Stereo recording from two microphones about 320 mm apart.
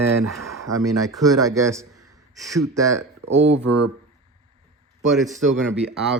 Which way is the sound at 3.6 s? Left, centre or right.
Right.